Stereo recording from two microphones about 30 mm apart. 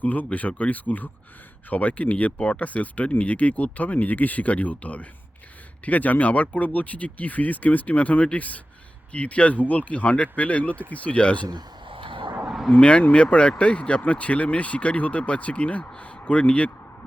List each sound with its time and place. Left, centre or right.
0.0 s speech: left
1.7 s speech: left
9.1 s speech: left
12.8 s speech: left